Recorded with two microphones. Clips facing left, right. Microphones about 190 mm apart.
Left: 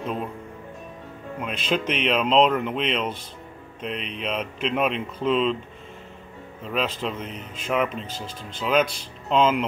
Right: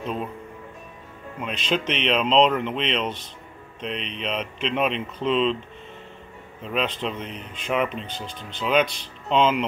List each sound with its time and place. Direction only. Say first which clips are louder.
1.6 s speech: even; 5° left (ahead or behind)
6.6 s speech: even; centre (ahead or behind)